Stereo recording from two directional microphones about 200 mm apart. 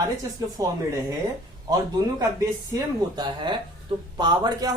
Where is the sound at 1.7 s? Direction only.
20° right (ahead or behind).